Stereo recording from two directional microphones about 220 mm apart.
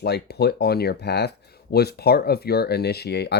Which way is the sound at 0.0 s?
45° left (ahead or behind).